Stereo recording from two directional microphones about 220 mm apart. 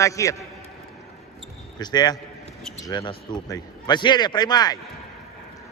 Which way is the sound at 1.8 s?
20° left (ahead or behind).